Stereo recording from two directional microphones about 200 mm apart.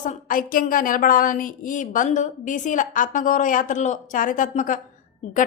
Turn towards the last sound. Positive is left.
turn(degrees=40)  # may be behind; listen again after turning